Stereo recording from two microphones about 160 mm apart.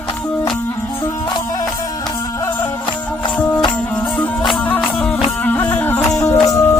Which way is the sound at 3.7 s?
10° left (ahead or behind).